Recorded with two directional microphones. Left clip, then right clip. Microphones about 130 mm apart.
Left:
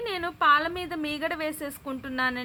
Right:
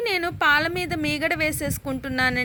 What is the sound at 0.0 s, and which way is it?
A woman's voice, 25° right (ahead or behind).